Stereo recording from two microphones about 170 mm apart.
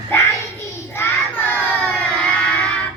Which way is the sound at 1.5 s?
10° left (ahead or behind).